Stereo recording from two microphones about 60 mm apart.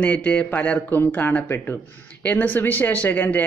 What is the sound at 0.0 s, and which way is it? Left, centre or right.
Speech, left.